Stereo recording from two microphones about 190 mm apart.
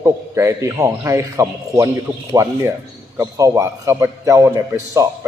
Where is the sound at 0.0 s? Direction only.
15° right (ahead or behind).